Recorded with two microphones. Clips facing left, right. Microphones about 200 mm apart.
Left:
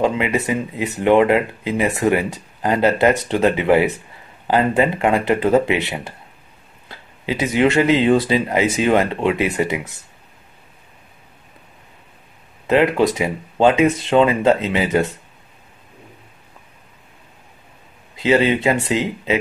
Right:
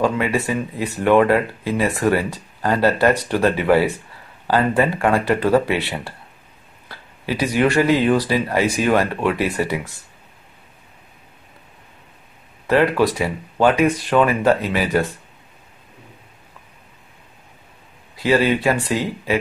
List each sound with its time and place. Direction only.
0.0 s speech: 20° left (ahead or behind)
12.6 s speech: 20° left (ahead or behind)
18.1 s speech: 20° left (ahead or behind)